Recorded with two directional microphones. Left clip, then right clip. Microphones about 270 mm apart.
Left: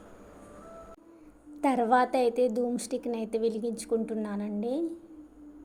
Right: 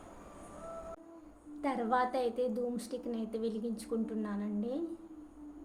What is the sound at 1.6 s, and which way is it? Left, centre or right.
A woman's voice, left.